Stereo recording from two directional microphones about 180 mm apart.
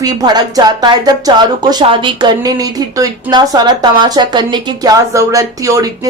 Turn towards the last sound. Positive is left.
turn(degrees=-20)  # may be behind; listen again after turning